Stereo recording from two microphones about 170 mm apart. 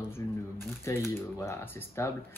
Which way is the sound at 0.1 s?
15° left (ahead or behind).